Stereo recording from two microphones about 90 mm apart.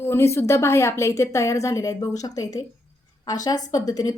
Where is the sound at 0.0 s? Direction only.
30° left (ahead or behind).